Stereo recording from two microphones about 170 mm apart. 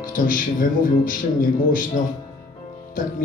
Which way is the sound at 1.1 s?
55° left (ahead or behind).